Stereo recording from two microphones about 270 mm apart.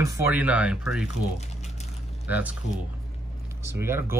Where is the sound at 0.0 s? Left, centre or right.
Centre.